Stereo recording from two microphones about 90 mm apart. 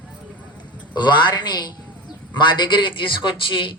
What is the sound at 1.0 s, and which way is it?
A woman's voice, 60° left (ahead or behind).